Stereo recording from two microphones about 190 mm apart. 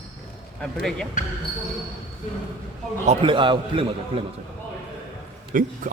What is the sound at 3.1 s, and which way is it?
Speech, 25° right (ahead or behind).